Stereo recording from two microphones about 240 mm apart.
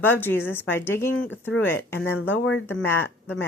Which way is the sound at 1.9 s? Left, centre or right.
Left.